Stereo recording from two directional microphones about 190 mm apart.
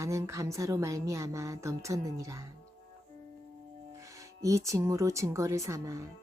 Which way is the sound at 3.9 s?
15° right (ahead or behind).